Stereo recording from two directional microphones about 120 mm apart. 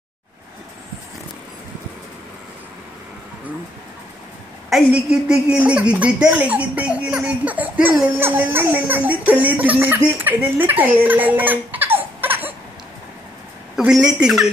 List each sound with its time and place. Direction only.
4.6 s a woman's voice: 5° right (ahead or behind)
13.7 s speech: 5° right (ahead or behind)